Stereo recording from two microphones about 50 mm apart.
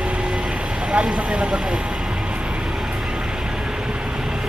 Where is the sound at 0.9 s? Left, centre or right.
Centre.